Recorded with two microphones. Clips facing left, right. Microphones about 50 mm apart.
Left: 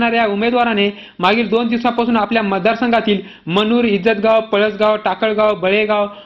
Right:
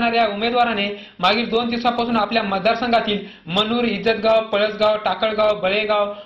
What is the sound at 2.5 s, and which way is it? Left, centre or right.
Speech, left.